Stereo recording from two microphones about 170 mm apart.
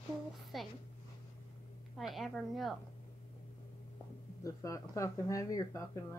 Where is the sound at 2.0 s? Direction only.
Centre (ahead or behind).